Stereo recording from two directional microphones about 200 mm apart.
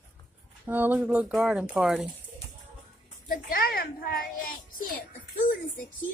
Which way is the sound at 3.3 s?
45° left (ahead or behind).